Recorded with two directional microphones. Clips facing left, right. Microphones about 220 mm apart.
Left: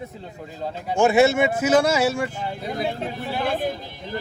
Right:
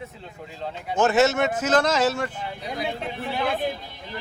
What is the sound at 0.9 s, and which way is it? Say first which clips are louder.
Speech: left 3 dB; 10° left (ahead or behind).